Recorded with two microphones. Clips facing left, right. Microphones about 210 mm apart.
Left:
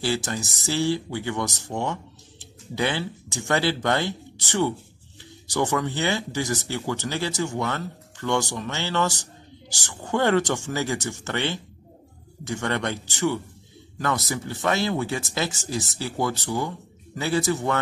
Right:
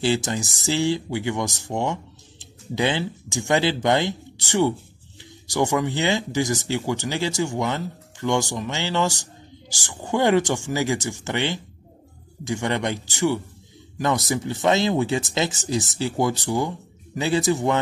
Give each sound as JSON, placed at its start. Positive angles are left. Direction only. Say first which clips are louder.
{"t": 0.0, "sound": "speech", "louder": "right 4 dB", "side_deg": -20}